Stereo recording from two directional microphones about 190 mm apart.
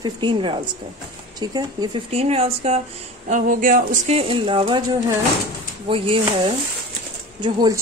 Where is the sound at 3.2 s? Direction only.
45° right (ahead or behind); by 4.8 s 25° right (ahead or behind).